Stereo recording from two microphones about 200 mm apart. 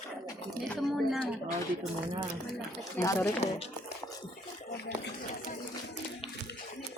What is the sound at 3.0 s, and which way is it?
Speech, 15° left (ahead or behind).